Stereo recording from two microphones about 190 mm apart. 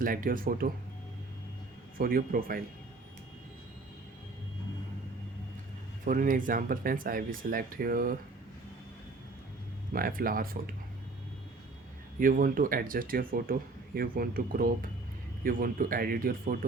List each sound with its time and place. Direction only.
0.0 s speech: 45° right (ahead or behind)
2.0 s speech: 50° right (ahead or behind)
6.1 s speech: 45° right (ahead or behind)
9.9 s speech: 50° right (ahead or behind)
12.2 s speech: 45° right (ahead or behind)